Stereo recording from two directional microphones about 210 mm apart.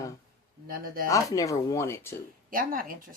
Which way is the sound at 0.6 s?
45° right (ahead or behind).